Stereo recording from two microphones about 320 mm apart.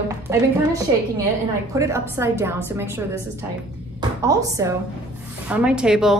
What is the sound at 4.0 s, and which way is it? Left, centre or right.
A woman's voice, centre.